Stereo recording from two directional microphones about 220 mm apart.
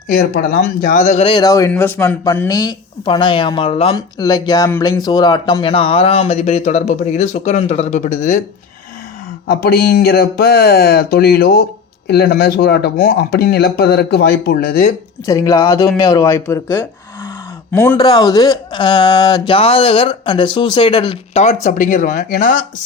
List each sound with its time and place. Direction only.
0.1 s speech: 45° left (ahead or behind)
9.5 s speech: 45° left (ahead or behind)
15.3 s speech: 15° left (ahead or behind); by 22.5 s 35° left (ahead or behind)